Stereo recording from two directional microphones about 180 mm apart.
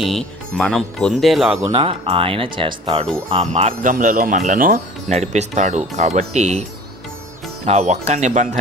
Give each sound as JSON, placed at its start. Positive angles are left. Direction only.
{"t": 0.0, "sound": "speech", "side_deg": 0}
{"t": 1.7, "sound": "speech", "side_deg": -30}